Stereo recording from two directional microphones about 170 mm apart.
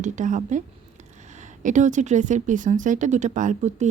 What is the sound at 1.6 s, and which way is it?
Speech, 45° right (ahead or behind).